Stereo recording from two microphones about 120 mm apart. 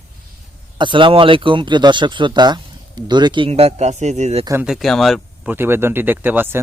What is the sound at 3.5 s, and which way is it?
Speech, 60° right (ahead or behind).